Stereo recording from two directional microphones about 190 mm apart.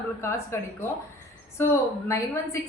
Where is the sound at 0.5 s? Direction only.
15° left (ahead or behind).